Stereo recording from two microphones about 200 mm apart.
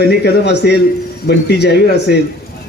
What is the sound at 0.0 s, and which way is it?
Speech, 55° left (ahead or behind).